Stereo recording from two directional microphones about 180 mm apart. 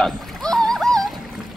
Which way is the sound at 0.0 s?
5° left (ahead or behind).